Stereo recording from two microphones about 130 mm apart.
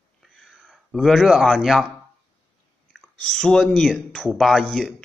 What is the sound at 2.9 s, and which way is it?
Speech, 5° left (ahead or behind).